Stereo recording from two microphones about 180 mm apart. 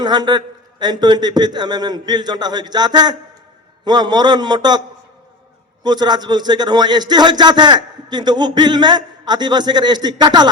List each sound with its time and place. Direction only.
0.0 s a man's voice: 25° right (ahead or behind)
5.8 s a man's voice: 25° right (ahead or behind)